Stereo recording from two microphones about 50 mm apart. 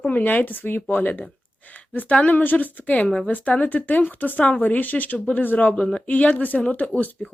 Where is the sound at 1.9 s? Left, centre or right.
Left.